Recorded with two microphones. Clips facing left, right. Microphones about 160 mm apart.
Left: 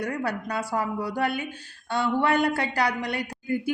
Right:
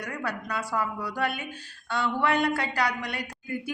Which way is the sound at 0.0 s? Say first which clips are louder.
Left 5 dB; 30° left (ahead or behind).